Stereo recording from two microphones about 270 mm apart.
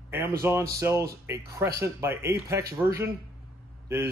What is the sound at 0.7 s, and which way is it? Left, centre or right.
Speech, centre.